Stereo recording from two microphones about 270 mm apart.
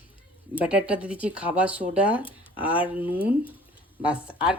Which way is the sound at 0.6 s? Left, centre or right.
Centre.